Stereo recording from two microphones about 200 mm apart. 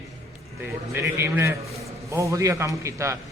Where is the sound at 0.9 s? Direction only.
10° right (ahead or behind).